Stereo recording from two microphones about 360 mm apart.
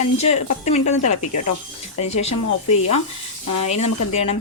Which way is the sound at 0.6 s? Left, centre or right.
Centre.